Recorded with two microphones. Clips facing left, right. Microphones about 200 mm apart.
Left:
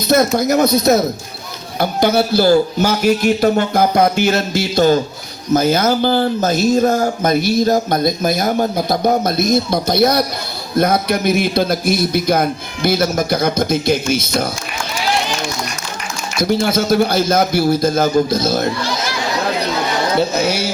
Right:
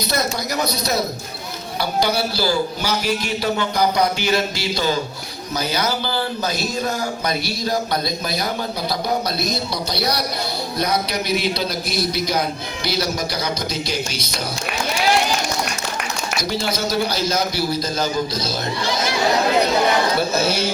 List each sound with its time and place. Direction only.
0.1 s speech: 50° left (ahead or behind)
2.1 s speech: 55° left (ahead or behind)
16.4 s speech: 55° left (ahead or behind)
20.3 s speech: 15° left (ahead or behind)